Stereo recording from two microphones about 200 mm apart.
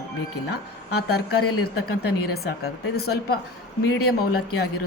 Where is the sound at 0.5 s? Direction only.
55° left (ahead or behind).